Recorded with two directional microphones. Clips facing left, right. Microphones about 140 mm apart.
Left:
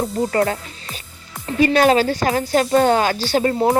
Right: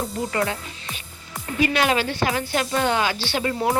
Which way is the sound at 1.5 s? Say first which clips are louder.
Left 7 dB; 35° left (ahead or behind).